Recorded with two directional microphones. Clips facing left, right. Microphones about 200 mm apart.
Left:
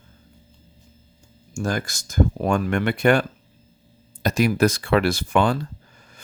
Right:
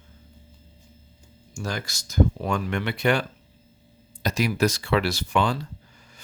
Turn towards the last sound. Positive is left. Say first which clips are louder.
# left 4 dB
turn(degrees=50)  # may be behind; listen again after turning